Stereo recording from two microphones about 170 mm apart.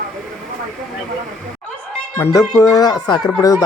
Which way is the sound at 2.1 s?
15° left (ahead or behind).